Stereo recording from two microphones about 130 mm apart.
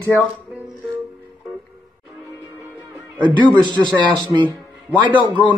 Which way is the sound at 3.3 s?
35° right (ahead or behind).